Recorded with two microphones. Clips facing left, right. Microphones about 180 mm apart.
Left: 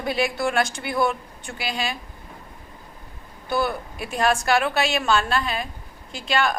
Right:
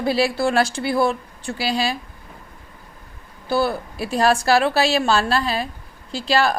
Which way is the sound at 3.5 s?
35° right (ahead or behind).